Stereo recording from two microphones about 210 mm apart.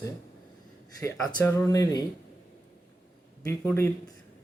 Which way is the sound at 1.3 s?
15° left (ahead or behind).